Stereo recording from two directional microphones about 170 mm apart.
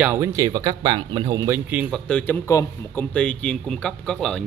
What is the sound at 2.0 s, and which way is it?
Speech, 10° left (ahead or behind).